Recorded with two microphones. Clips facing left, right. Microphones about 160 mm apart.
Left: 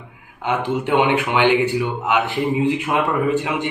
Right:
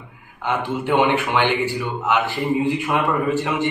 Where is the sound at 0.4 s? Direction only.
15° left (ahead or behind).